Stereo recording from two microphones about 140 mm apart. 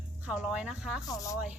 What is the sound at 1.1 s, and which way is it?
Speech, 25° left (ahead or behind).